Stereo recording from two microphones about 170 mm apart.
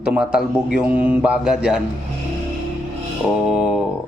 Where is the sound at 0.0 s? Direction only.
5° right (ahead or behind).